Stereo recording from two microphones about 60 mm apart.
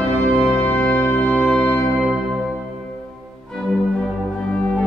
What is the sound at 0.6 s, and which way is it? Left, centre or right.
Music, left.